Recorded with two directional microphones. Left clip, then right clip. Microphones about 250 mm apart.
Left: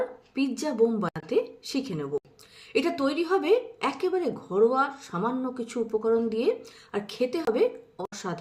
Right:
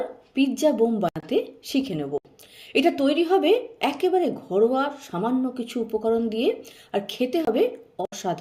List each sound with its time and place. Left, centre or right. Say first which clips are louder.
0.3 s speech: right 5 dB; centre